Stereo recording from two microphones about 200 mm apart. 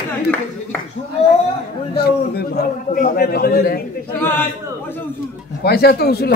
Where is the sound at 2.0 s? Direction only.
55° left (ahead or behind).